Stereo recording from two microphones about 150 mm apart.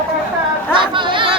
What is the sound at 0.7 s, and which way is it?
Chatter, 35° right (ahead or behind).